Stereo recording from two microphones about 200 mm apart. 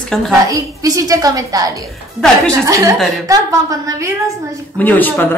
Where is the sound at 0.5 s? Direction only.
15° right (ahead or behind).